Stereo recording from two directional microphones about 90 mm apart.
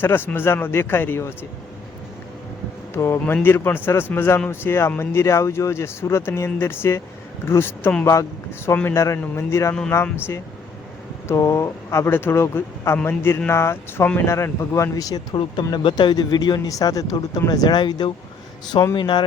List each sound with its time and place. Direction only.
0.0 s speech: 25° left (ahead or behind)
2.9 s a man's voice: 25° left (ahead or behind); by 15.4 s 45° left (ahead or behind)
15.8 s speech: 65° left (ahead or behind)